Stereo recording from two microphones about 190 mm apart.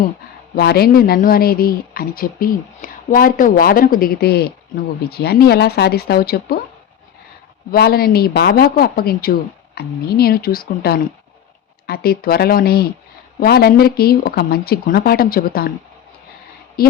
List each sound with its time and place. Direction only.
0.5 s speech: 55° left (ahead or behind)
7.7 s speech: 55° left (ahead or behind)
16.8 s speech: 50° left (ahead or behind)